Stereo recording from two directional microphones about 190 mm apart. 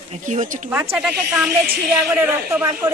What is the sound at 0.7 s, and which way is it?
Speech, 5° right (ahead or behind).